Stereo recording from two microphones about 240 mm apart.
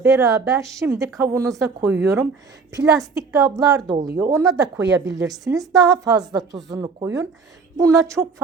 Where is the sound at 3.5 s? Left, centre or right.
Centre.